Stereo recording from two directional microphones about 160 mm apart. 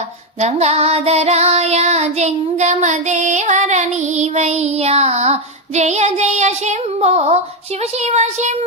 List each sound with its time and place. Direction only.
0.3 s child singing: 45° right (ahead or behind)